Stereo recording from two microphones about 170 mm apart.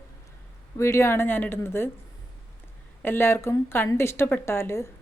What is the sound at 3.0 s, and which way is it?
A woman's voice, 15° left (ahead or behind).